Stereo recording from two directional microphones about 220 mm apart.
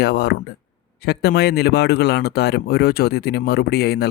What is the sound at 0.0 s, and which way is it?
A man's voice, 45° left (ahead or behind).